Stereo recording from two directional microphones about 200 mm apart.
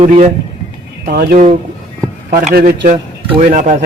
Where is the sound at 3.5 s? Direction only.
40° right (ahead or behind).